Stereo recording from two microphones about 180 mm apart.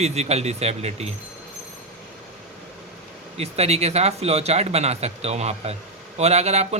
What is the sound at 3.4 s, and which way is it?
A man's voice, 35° right (ahead or behind).